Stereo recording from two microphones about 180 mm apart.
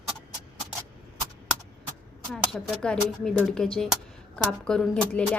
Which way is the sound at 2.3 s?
Centre (ahead or behind).